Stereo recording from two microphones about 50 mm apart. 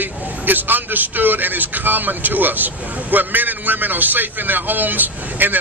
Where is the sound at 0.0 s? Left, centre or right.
Right.